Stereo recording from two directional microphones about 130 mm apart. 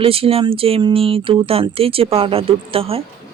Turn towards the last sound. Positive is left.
turn(degrees=-50)  # may be behind; listen again after turning